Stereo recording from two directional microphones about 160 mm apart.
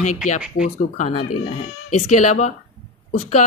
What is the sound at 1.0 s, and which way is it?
Speech, 35° left (ahead or behind).